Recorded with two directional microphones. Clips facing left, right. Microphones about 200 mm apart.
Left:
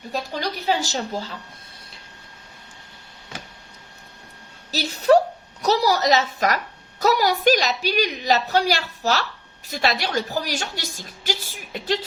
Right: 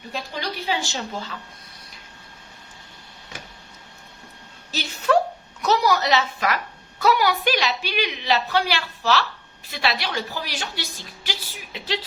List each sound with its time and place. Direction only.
0.1 s a woman's voice: 40° left (ahead or behind)
4.7 s a woman's voice: 35° left (ahead or behind)